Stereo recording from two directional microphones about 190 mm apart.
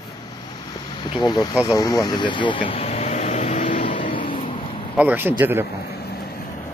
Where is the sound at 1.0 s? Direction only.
25° left (ahead or behind).